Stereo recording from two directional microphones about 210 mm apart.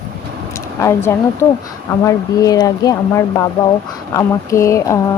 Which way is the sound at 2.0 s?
15° left (ahead or behind).